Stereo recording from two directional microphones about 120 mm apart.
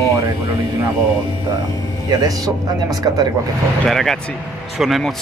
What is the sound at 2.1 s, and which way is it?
Speech, 30° right (ahead or behind).